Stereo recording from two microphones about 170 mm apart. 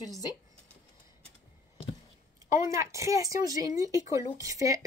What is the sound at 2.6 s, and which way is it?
Speech, 20° right (ahead or behind).